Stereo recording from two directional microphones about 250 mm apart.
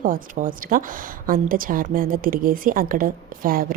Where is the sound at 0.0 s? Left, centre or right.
Right.